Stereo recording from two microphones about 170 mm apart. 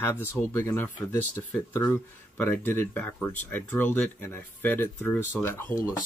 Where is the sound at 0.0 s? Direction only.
15° left (ahead or behind).